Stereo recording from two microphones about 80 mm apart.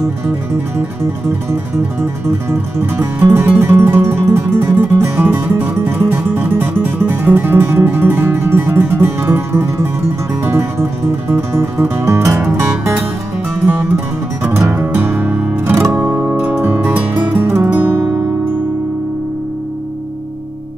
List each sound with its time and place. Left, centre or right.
1.5 s music: right
14.4 s music: right